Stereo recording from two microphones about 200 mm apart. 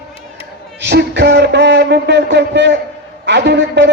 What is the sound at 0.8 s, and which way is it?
A man's voice, 55° right (ahead or behind).